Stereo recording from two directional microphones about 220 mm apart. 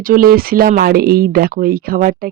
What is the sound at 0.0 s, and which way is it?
Speech, 40° right (ahead or behind).